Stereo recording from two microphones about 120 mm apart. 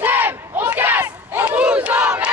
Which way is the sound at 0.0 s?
15° right (ahead or behind).